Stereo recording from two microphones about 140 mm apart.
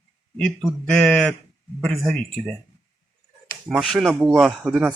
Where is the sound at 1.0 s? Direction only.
5° left (ahead or behind).